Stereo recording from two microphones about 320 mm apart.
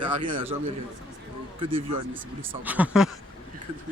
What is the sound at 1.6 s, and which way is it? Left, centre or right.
Speech, centre.